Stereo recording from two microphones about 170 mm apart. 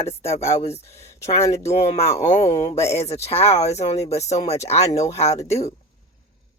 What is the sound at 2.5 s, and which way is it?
Speech, 15° left (ahead or behind).